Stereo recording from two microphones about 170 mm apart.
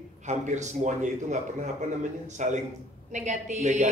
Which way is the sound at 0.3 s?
45° right (ahead or behind).